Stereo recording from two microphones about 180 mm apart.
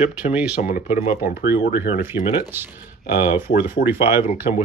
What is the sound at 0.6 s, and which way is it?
Speech, 45° left (ahead or behind).